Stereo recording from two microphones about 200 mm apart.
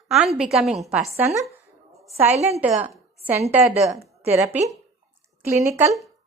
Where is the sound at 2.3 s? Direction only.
35° right (ahead or behind).